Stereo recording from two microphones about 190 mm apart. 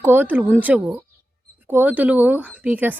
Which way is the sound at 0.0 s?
10° right (ahead or behind).